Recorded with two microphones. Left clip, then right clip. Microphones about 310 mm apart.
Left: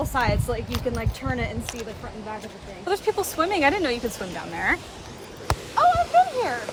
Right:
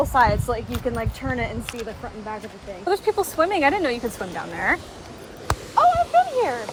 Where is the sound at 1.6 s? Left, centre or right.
Left.